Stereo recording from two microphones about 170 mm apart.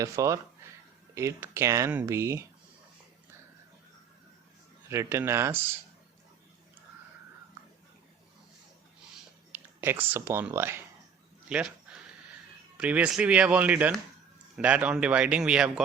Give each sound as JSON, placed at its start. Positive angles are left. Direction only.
{"t": 0.0, "sound": "speech", "side_deg": -20}
{"t": 4.9, "sound": "speech", "side_deg": -15}
{"t": 9.5, "sound": "a sound", "side_deg": -15}
{"t": 10.2, "sound": "speech", "side_deg": -15}
{"t": 12.7, "sound": "speech", "side_deg": -5}